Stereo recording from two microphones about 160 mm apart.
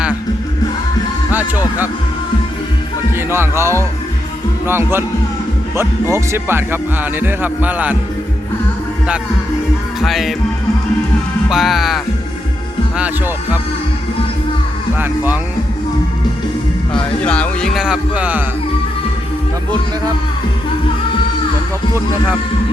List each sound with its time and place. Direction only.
1.3 s speech: 10° right (ahead or behind)
3.2 s speech: 15° right (ahead or behind)
10.0 s speech: centre (ahead or behind)
11.4 s speech: centre (ahead or behind)
14.9 s speech: 15° right (ahead or behind)
17.2 s speech: 5° left (ahead or behind); by 18.4 s 10° right (ahead or behind)